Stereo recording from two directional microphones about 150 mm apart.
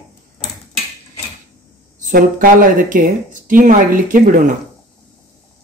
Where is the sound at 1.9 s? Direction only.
60° right (ahead or behind).